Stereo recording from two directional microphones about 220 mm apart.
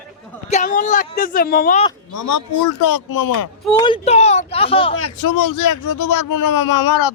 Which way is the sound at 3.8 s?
25° left (ahead or behind).